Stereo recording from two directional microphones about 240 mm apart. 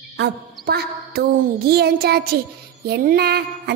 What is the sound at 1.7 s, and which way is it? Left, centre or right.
Music, right.